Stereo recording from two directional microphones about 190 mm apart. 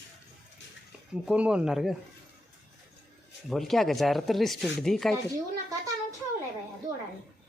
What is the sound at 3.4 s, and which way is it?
Speech, centre (ahead or behind).